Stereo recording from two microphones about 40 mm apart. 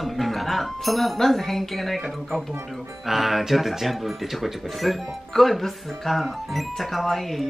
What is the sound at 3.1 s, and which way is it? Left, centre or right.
Speech, centre.